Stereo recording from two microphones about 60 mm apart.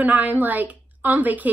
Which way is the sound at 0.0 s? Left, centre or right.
Right.